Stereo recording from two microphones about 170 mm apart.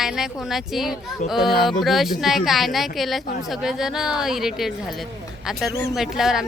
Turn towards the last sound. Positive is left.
turn(degrees=-5)  # may be behind; listen again after turning